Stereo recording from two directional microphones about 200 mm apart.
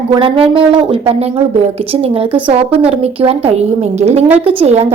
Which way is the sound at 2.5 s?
30° right (ahead or behind).